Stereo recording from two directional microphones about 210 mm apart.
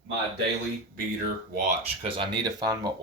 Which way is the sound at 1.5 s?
35° right (ahead or behind).